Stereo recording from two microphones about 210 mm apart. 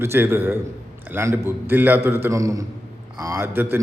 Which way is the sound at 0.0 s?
10° right (ahead or behind).